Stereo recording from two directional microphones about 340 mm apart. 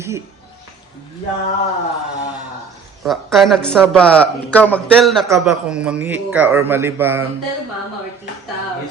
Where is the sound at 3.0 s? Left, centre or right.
Centre.